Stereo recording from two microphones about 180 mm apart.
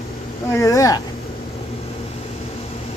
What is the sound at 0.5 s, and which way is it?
Speech, 20° left (ahead or behind).